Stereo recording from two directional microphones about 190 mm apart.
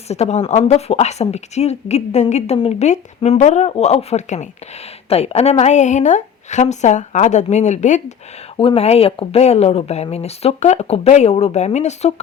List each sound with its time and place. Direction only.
0.1 s speech: 35° left (ahead or behind)